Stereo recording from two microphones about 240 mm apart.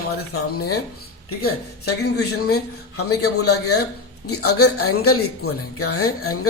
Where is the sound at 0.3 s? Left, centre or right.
Left.